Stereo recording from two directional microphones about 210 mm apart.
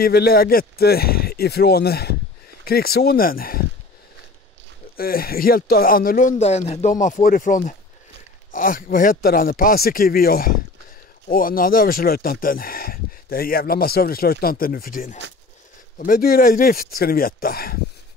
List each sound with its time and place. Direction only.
0.0 s speech: 45° left (ahead or behind)
4.9 s speech: 45° left (ahead or behind)